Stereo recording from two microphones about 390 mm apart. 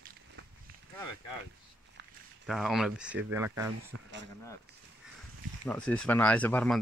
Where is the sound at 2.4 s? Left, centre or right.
Centre.